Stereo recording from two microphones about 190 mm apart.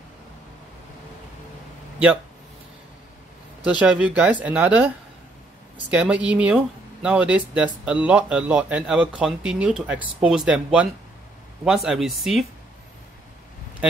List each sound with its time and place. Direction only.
3.6 s speech: 5° right (ahead or behind)